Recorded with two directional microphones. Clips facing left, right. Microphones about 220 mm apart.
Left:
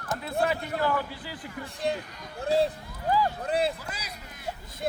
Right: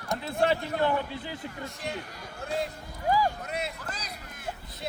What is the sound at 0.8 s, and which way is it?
Speech, 25° right (ahead or behind).